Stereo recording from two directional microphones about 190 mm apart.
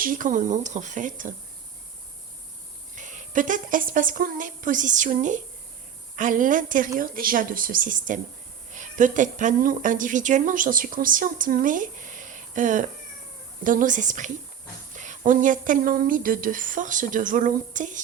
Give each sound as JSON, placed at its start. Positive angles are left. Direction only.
{"t": 0.0, "sound": "speech", "side_deg": -45}
{"t": 2.9, "sound": "a woman's voice", "side_deg": -40}